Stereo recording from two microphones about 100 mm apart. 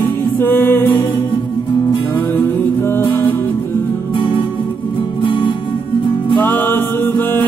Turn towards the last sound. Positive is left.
turn(degrees=20)  # may be behind; listen again after turning